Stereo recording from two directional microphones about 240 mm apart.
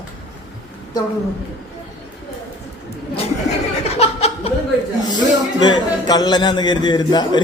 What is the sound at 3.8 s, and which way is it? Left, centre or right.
Laughter, left.